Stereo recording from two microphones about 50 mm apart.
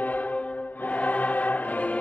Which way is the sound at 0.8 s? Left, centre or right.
Left.